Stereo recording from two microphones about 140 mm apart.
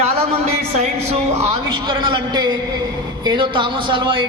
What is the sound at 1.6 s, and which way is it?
A man's voice, 30° right (ahead or behind).